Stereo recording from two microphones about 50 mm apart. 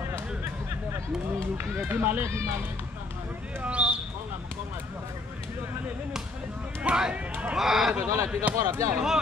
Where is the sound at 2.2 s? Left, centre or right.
Right.